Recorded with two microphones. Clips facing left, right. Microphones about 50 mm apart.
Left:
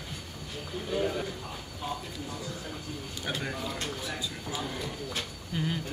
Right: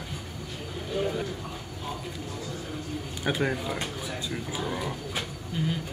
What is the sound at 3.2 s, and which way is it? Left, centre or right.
Speech, centre.